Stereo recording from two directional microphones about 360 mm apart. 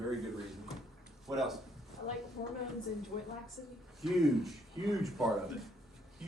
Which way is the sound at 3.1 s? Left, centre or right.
Centre.